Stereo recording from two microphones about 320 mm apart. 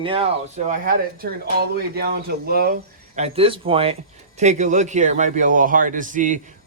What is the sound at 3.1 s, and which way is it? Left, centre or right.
Rub, centre.